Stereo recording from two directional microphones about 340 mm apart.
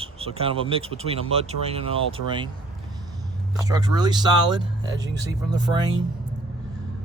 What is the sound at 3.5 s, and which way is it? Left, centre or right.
Speech, centre.